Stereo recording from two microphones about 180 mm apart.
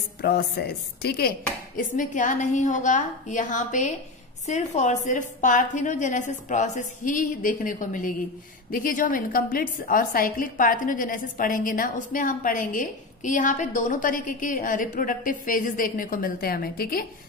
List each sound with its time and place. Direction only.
0.2 s a woman's voice: 60° left (ahead or behind)
1.8 s a woman's voice: 45° left (ahead or behind)